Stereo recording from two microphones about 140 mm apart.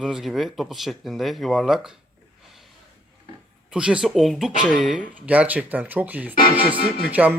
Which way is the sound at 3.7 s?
5° right (ahead or behind).